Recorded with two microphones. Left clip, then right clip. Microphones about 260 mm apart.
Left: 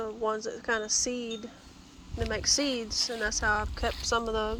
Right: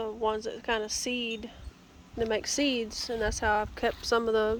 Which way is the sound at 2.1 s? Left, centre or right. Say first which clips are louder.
Even; right.